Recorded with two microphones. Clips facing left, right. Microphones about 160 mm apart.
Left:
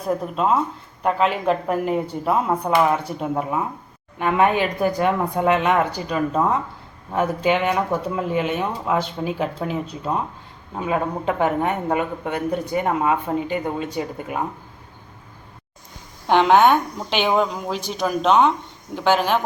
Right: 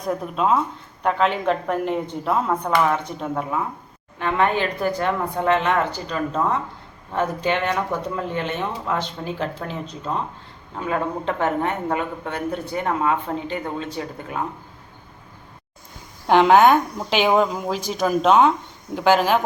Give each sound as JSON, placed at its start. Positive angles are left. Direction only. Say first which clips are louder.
{"t": 0.0, "sound": "speech", "louder": "left 1 dB", "side_deg": 0}
{"t": 16.2, "sound": "speech", "louder": "right 1 dB", "side_deg": 0}